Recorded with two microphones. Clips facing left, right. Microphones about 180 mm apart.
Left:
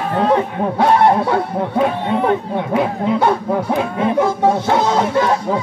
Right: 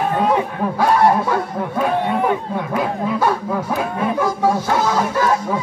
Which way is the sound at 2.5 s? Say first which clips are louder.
Left 3 dB; 25° left (ahead or behind).